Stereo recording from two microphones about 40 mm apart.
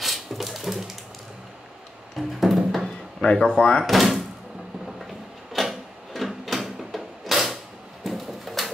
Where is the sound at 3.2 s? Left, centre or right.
Left.